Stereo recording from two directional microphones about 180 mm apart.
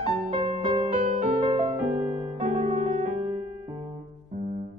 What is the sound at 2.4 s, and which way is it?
Music, 30° right (ahead or behind).